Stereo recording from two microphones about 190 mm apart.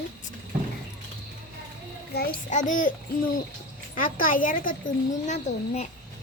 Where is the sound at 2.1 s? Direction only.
45° left (ahead or behind).